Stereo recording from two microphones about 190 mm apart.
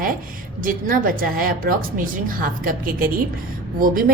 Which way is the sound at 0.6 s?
50° right (ahead or behind).